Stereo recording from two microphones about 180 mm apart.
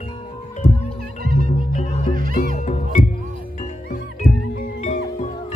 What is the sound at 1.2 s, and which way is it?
Music, 50° right (ahead or behind).